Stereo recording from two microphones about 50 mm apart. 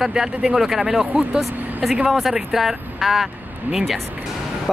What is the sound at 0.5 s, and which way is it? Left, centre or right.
Speech, centre.